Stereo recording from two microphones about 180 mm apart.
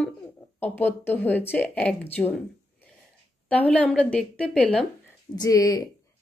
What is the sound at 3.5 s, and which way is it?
Speech, 5° left (ahead or behind).